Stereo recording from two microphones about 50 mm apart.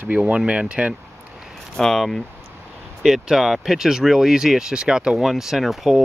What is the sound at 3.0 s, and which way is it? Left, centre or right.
Speech, centre.